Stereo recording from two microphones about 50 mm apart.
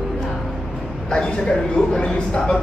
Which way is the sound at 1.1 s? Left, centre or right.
Centre.